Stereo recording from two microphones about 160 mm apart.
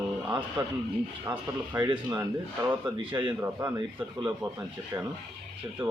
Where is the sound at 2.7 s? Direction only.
10° right (ahead or behind).